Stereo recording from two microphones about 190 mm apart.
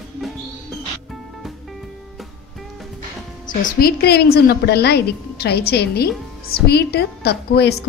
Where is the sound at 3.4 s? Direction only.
50° left (ahead or behind).